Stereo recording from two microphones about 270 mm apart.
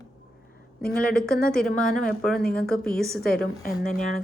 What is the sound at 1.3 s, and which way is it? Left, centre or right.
Speech, left.